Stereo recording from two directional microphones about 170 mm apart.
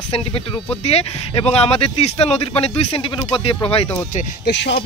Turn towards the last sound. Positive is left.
turn(degrees=85)